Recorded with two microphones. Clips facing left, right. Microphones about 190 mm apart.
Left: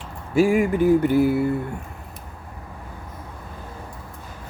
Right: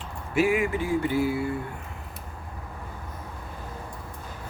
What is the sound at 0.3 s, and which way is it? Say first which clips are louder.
Speech: left 6 dB; 45° left (ahead or behind).